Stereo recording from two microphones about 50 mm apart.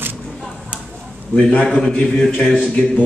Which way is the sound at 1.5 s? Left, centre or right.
Left.